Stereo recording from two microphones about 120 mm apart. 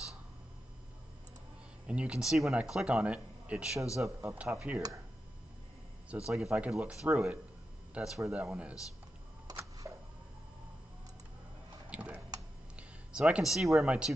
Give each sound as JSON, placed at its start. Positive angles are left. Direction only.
{"t": 1.9, "sound": "speech", "side_deg": -10}
{"t": 4.3, "sound": "speech", "side_deg": -20}
{"t": 6.0, "sound": "speech", "side_deg": -5}
{"t": 9.5, "sound": "camera", "side_deg": -30}
{"t": 11.9, "sound": "tick-tock", "side_deg": -10}
{"t": 12.7, "sound": "a sound", "side_deg": -10}
{"t": 13.7, "sound": "speech", "side_deg": -5}